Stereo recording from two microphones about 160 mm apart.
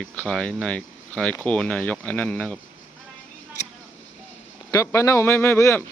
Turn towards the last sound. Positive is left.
turn(degrees=15)  # may be behind; listen again after turning